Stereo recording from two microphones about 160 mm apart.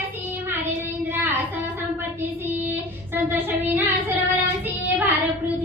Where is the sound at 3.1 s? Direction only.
10° right (ahead or behind).